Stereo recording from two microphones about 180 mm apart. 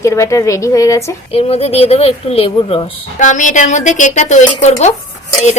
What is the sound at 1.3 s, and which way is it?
Speech, 35° left (ahead or behind).